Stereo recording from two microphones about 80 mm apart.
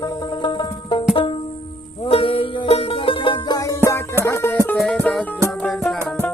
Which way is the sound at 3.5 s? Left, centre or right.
Left.